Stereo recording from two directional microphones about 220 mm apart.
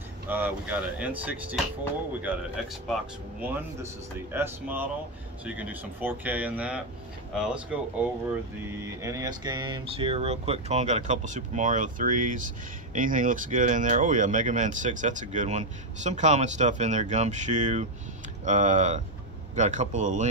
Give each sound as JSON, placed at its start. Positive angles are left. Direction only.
{"t": 0.3, "sound": "speech", "side_deg": -10}
{"t": 3.3, "sound": "speech", "side_deg": -10}